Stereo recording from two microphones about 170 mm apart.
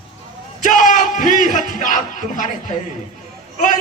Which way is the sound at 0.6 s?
50° left (ahead or behind).